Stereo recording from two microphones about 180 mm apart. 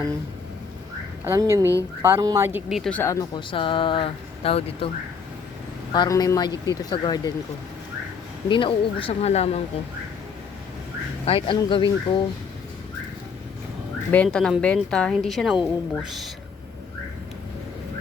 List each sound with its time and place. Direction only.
1.2 s speech: 15° right (ahead or behind)
2.9 s speech: 15° left (ahead or behind)
3.5 s speech: 30° left (ahead or behind)
5.9 s speech: 20° left (ahead or behind)
8.4 s speech: 30° left (ahead or behind)
11.3 s speech: 30° left (ahead or behind)
14.1 s a woman's voice: 5° left (ahead or behind)